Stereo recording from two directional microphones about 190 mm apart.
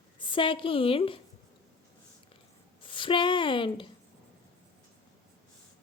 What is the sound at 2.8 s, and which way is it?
A woman's voice, 25° left (ahead or behind).